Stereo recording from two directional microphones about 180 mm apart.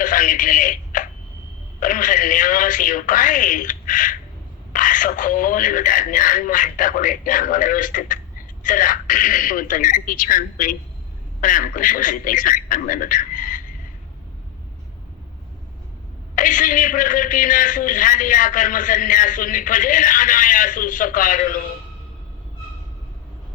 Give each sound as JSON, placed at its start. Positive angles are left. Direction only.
{"t": 0.0, "sound": "telephone", "side_deg": 45}
{"t": 1.8, "sound": "a man's voice", "side_deg": 45}
{"t": 16.3, "sound": "a man's voice", "side_deg": 45}